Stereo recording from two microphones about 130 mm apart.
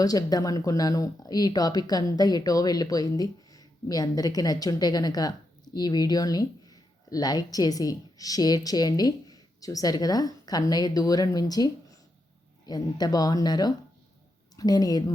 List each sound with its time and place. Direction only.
0.0 s speech: 30° left (ahead or behind)